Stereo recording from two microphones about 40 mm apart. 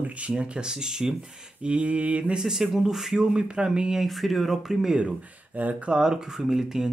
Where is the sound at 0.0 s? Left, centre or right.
Right.